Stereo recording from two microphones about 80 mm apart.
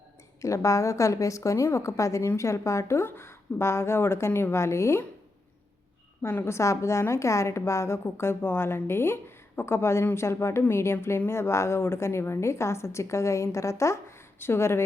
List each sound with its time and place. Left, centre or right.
0.4 s a woman's voice: left
6.2 s a woman's voice: left